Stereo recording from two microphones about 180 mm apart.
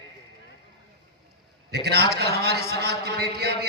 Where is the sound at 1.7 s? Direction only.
65° right (ahead or behind).